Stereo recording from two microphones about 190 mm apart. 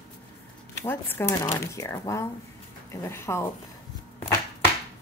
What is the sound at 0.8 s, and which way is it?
A woman's voice, 10° left (ahead or behind).